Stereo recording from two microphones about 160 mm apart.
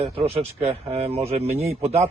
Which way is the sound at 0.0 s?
40° right (ahead or behind).